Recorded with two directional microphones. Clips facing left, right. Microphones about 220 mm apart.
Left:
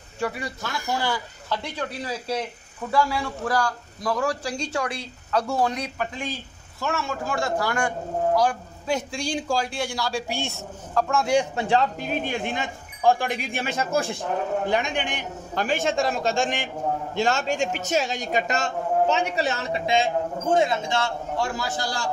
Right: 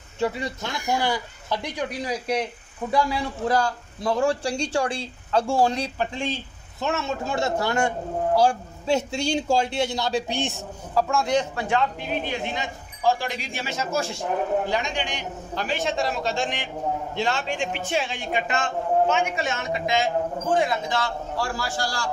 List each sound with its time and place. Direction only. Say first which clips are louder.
0.2 s a man's voice: right 3 dB; 20° right (ahead or behind)
11.1 s a man's voice: left 3 dB; 5° left (ahead or behind)
11.5 s a man's voice: left 2 dB; 35° left (ahead or behind)